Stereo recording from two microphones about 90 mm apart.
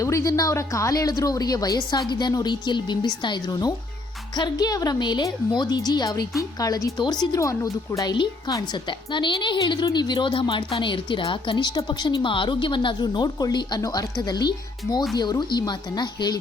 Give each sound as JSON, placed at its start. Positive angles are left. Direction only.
{"t": 0.0, "sound": "speech", "side_deg": 35}
{"t": 3.5, "sound": "a woman's voice", "side_deg": 45}
{"t": 7.3, "sound": "a woman's voice", "side_deg": 35}
{"t": 8.1, "sound": "speech", "side_deg": 55}